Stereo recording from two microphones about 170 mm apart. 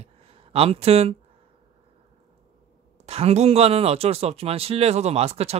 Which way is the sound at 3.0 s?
35° right (ahead or behind).